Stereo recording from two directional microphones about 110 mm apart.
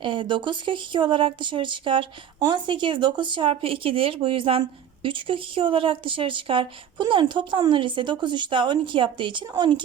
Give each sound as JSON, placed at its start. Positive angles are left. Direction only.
{"t": 0.0, "sound": "speech", "side_deg": -50}